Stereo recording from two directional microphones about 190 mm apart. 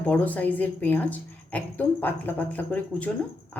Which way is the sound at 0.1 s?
10° left (ahead or behind).